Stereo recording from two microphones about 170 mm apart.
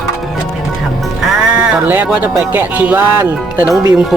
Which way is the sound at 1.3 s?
5° right (ahead or behind).